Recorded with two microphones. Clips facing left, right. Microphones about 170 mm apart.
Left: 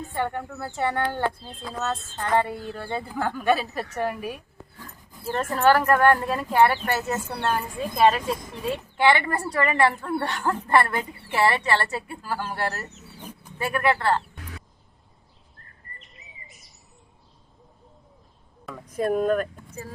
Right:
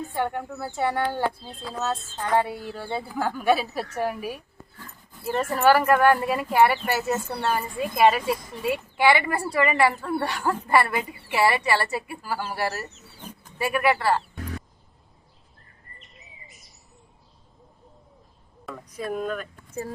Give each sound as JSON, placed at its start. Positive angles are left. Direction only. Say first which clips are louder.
{"t": 0.1, "sound": "speech", "louder": "left 1 dB", "side_deg": -10}
{"t": 16.0, "sound": "chirp", "louder": "even", "side_deg": 0}
{"t": 18.9, "sound": "speech", "louder": "left 7 dB", "side_deg": 50}